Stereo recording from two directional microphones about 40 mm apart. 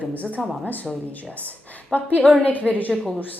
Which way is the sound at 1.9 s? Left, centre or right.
Left.